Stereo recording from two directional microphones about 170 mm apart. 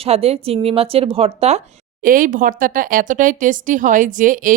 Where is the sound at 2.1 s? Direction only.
55° right (ahead or behind).